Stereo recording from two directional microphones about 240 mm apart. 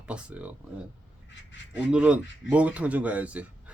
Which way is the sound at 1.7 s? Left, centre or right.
Centre.